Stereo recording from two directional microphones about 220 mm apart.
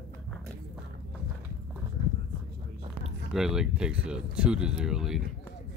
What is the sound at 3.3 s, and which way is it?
Speech, centre (ahead or behind).